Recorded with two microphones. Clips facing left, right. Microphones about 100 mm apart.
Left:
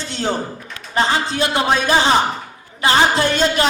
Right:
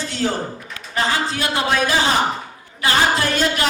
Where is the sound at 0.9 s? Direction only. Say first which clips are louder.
Left 3 dB; 25° left (ahead or behind).